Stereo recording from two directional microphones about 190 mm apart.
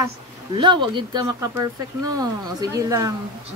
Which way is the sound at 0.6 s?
25° right (ahead or behind).